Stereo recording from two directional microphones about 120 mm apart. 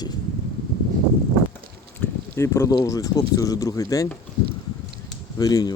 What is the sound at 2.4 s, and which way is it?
Speech, 25° left (ahead or behind).